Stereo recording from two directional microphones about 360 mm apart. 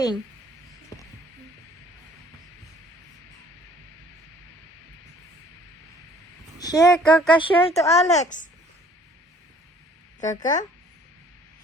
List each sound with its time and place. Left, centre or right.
6.6 s speech: centre
10.2 s speech: left